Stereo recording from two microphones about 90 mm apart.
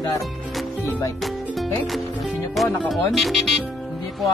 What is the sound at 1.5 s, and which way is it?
Music, centre (ahead or behind).